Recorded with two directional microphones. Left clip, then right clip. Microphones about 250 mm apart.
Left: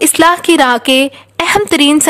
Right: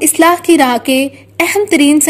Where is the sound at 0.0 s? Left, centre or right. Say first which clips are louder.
Left 1 dB; left.